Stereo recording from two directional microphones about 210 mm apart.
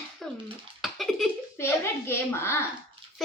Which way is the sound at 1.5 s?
10° left (ahead or behind).